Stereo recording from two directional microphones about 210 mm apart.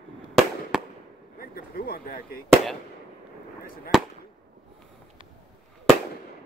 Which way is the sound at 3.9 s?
Centre (ahead or behind).